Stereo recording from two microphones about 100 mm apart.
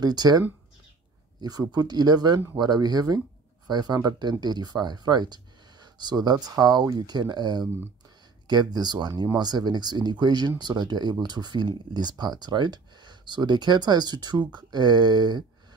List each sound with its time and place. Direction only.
0.0 s speech: 45° right (ahead or behind)
1.4 s speech: 40° right (ahead or behind)